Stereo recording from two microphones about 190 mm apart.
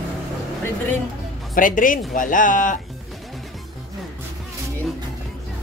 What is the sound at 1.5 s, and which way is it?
Speech, 45° left (ahead or behind).